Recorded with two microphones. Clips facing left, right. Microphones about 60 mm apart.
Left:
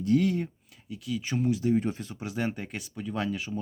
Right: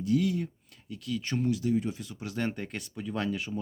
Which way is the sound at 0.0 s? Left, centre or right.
Left.